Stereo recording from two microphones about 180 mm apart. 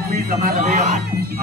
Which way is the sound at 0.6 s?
40° right (ahead or behind).